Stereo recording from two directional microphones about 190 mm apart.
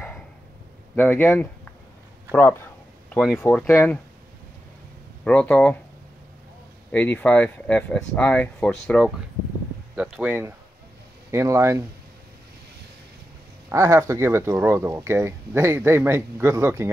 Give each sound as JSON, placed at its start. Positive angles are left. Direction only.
{"t": 0.9, "sound": "speech", "side_deg": 10}
{"t": 3.3, "sound": "speech", "side_deg": 10}
{"t": 5.2, "sound": "speech", "side_deg": 5}
{"t": 6.9, "sound": "speech", "side_deg": 10}
{"t": 13.7, "sound": "speech", "side_deg": -15}